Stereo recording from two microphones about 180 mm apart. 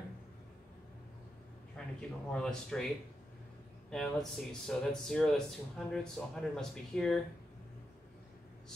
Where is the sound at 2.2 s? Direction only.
5° left (ahead or behind).